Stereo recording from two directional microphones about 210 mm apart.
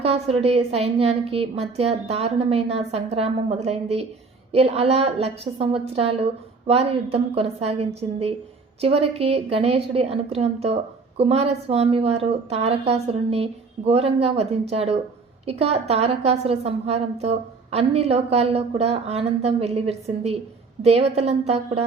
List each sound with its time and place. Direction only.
0.0 s a woman's voice: 30° right (ahead or behind)